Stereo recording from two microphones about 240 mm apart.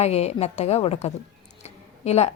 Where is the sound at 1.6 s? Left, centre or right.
Left.